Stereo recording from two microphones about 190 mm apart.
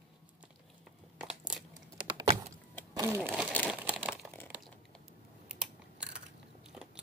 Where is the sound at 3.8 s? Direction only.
5° right (ahead or behind).